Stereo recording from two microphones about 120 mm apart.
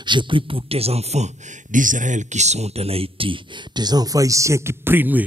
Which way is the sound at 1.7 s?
90° right.